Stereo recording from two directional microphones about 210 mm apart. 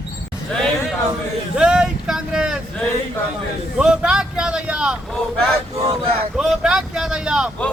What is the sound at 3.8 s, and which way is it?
Vehicle, 5° right (ahead or behind).